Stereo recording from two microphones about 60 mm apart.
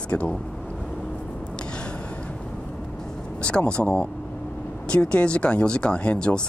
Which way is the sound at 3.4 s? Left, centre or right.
Centre.